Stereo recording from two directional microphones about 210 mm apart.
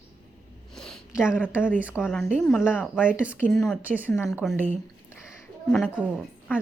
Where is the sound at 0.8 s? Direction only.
Centre (ahead or behind).